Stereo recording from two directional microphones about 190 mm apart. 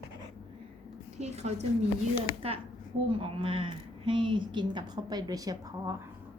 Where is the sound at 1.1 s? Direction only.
35° right (ahead or behind).